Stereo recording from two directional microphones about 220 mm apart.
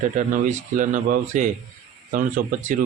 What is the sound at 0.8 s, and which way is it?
Speech, 35° right (ahead or behind).